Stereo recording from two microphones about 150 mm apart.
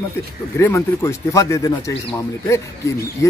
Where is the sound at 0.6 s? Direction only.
15° left (ahead or behind).